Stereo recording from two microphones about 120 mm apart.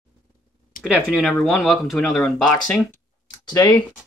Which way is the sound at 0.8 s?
10° right (ahead or behind).